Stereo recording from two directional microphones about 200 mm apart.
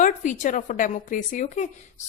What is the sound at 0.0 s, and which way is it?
A woman's voice, 40° left (ahead or behind).